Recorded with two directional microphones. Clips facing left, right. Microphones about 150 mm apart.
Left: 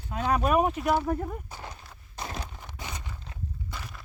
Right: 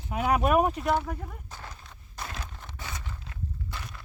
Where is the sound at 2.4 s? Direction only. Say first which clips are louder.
Left 1 dB; 10° left (ahead or behind).